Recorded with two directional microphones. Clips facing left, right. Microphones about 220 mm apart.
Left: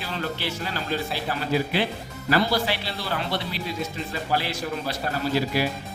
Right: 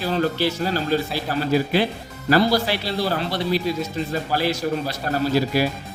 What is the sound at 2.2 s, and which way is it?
Speech, 40° right (ahead or behind).